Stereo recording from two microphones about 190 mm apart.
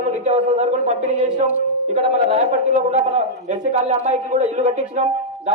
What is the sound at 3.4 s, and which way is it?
A man's voice, 35° right (ahead or behind).